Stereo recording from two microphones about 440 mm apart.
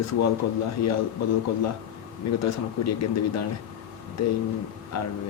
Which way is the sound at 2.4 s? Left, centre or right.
Left.